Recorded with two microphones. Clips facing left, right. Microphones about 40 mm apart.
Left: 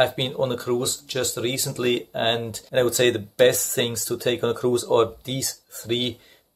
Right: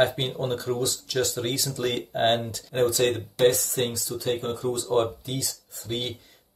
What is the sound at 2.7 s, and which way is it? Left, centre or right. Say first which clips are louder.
Speech: left 3 dB; left.